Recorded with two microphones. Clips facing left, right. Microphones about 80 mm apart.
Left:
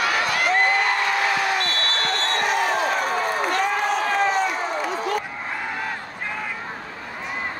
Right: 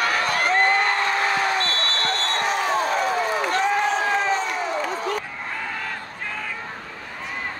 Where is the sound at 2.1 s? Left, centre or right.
Left.